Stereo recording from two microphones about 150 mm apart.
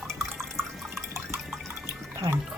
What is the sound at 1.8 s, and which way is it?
Water, 20° right (ahead or behind).